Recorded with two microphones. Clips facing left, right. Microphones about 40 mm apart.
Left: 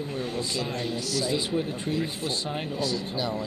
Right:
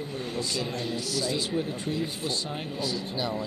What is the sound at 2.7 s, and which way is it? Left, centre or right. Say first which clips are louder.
Speech: left 1 dB; centre.